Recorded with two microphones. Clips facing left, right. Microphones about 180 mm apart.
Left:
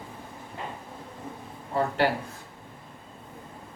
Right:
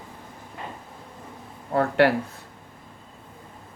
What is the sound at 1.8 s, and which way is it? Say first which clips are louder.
Speech: right 5 dB; 65° right (ahead or behind).